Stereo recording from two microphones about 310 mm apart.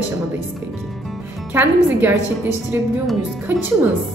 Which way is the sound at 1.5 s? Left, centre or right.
Centre.